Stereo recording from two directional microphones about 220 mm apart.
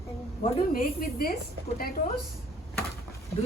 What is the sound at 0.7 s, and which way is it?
Speech, 40° left (ahead or behind).